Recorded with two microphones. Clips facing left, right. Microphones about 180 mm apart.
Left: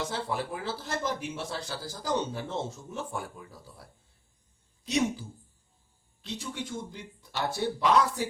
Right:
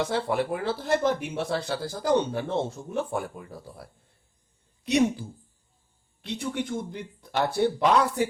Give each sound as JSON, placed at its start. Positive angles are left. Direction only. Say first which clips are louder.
{"t": 0.0, "sound": "a woman's voice", "louder": "right 6 dB", "side_deg": -60}
{"t": 6.2, "sound": "speech", "louder": "right 7 dB", "side_deg": -60}